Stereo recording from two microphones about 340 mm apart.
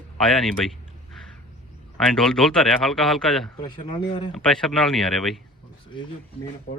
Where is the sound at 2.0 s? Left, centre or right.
Centre.